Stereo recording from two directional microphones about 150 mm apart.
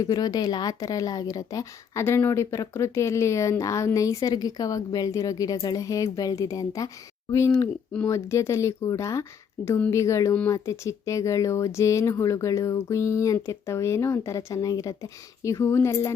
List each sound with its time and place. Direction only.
0.0 s a woman's voice: 25° left (ahead or behind)